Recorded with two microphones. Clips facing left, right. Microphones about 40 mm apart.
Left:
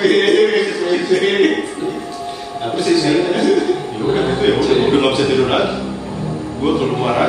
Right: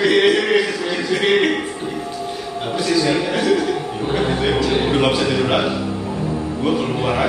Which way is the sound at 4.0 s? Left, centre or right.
Centre.